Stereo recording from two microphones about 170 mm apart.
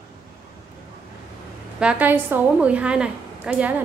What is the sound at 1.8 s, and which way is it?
A woman's voice, 10° right (ahead or behind).